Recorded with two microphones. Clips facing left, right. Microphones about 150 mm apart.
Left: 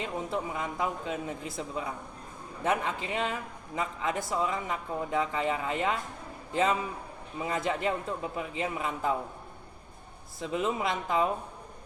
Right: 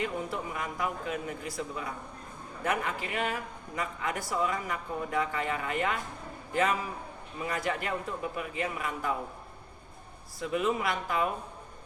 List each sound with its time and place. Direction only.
0.0 s a man's voice: 25° left (ahead or behind)
10.4 s speech: 25° left (ahead or behind)